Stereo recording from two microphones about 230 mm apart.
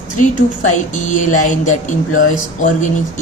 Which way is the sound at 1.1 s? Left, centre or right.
Left.